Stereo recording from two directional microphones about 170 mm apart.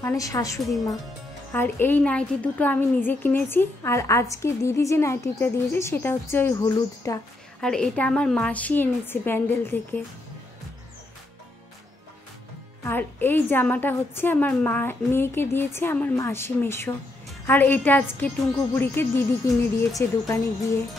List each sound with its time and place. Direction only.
0.0 s a woman's voice: 20° left (ahead or behind)
7.6 s a woman's voice: 5° left (ahead or behind)
12.8 s a woman's voice: 10° left (ahead or behind)